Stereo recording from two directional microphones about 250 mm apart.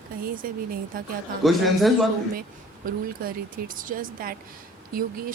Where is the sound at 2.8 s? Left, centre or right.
Right.